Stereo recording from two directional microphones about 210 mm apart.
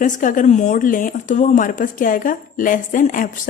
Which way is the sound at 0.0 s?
40° left (ahead or behind).